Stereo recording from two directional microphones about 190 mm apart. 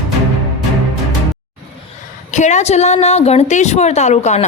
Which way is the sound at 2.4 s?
40° left (ahead or behind).